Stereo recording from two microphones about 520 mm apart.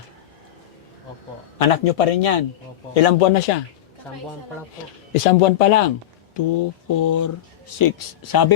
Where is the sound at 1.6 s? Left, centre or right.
Left.